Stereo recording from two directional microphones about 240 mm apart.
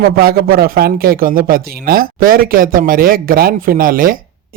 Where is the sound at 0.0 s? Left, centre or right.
Right.